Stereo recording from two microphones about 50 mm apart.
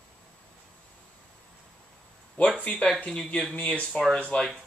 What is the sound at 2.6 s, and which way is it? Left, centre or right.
Speech, left.